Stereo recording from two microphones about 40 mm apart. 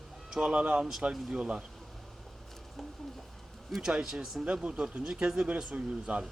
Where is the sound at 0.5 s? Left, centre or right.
Right.